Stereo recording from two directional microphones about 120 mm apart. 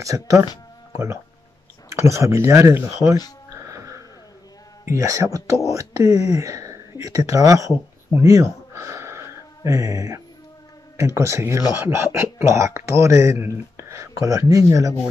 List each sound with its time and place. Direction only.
0.0 s speech: 25° right (ahead or behind)
3.6 s music: 25° right (ahead or behind)
4.8 s speech: 25° right (ahead or behind)
8.2 s a sound: 25° right (ahead or behind)
9.7 s speech: 25° right (ahead or behind)